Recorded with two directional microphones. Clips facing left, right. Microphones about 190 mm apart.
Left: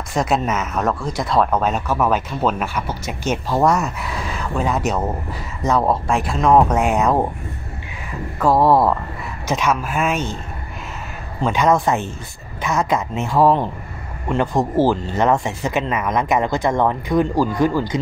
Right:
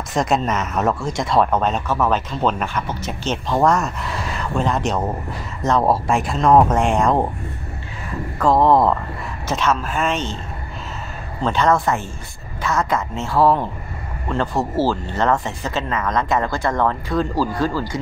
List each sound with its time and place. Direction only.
0.1 s speech: centre (ahead or behind)
8.4 s speech: 10° left (ahead or behind)
11.4 s speech: 10° left (ahead or behind)